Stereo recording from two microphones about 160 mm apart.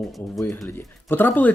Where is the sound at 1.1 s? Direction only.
15° left (ahead or behind).